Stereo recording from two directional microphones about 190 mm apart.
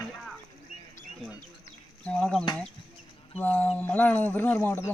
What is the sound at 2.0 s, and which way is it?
Speech, 5° left (ahead or behind).